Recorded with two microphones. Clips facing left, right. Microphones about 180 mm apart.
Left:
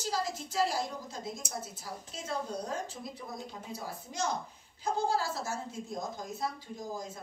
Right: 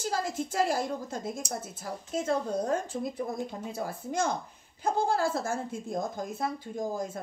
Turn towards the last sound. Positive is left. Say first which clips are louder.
# right 7 dB
turn(degrees=-55)  # may be behind; listen again after turning